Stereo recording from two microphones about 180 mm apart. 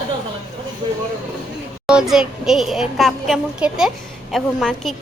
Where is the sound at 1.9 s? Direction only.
5° right (ahead or behind).